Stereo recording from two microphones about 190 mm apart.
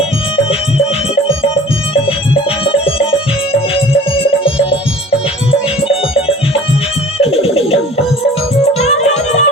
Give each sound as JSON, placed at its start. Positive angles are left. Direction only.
{"t": 4.4, "sound": "music", "side_deg": 30}
{"t": 7.2, "sound": "music", "side_deg": 30}
{"t": 8.8, "sound": "music", "side_deg": 35}